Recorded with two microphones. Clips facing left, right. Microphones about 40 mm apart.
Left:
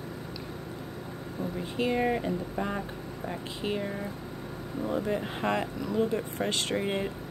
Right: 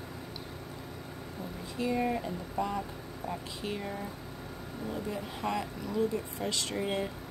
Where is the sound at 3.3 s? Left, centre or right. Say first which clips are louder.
Left 4 dB; left.